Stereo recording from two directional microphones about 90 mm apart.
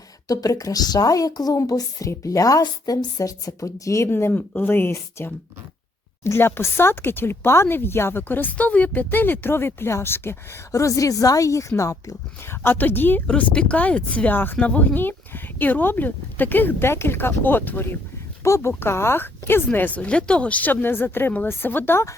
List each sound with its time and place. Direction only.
0.3 s speech: 40° left (ahead or behind)